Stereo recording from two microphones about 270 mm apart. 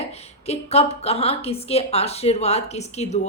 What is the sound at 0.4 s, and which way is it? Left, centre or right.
A woman's voice, left.